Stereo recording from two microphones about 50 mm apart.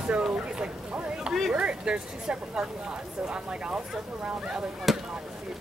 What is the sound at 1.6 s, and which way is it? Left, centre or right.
Speech, centre.